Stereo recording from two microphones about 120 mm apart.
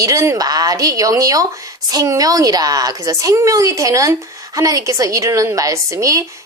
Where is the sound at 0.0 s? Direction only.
30° right (ahead or behind).